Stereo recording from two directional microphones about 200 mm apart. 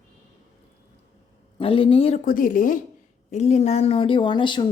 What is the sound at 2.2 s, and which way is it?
A woman's voice, 40° left (ahead or behind).